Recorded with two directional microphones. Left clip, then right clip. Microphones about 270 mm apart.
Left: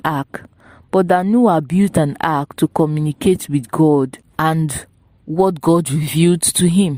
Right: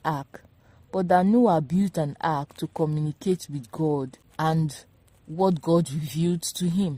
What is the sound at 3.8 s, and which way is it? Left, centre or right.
Speech, left.